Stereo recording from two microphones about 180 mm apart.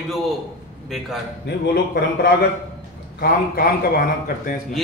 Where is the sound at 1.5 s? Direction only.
65° left (ahead or behind).